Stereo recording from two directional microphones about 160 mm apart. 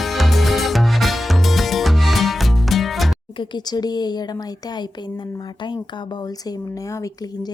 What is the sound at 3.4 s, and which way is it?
Speech, 25° left (ahead or behind).